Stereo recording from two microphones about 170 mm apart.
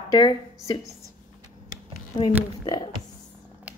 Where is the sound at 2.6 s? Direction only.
25° left (ahead or behind).